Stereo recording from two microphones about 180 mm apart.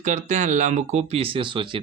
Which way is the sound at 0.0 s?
45° right (ahead or behind).